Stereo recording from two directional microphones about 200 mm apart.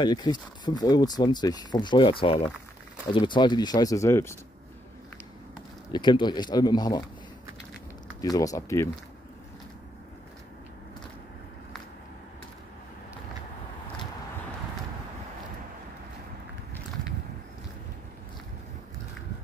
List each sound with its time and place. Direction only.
0.0 s speech: 20° left (ahead or behind)
5.9 s speech: 20° left (ahead or behind)
8.2 s speech: 15° left (ahead or behind)